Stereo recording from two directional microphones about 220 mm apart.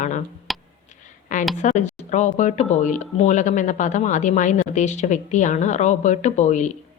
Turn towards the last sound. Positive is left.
turn(degrees=35)  # may be behind; listen again after turning